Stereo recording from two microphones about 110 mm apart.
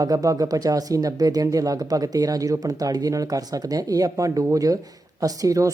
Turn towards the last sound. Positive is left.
turn(degrees=-30)  # may be behind; listen again after turning